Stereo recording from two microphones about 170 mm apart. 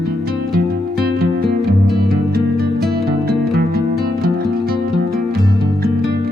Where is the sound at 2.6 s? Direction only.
65° right (ahead or behind).